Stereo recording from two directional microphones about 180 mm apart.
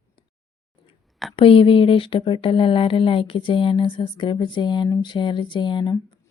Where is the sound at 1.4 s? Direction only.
30° left (ahead or behind).